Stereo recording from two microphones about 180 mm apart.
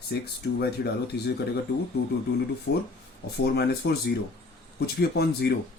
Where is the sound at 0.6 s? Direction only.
60° left (ahead or behind).